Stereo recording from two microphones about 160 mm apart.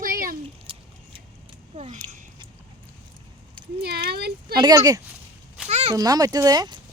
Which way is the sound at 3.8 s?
90° right.